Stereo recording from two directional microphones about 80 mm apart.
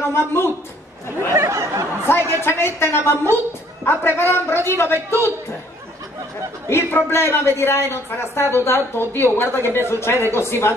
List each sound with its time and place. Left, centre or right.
0.1 s a woman's voice: left
1.3 s a sound: right
2.0 s a woman's voice: left
6.7 s a woman's voice: left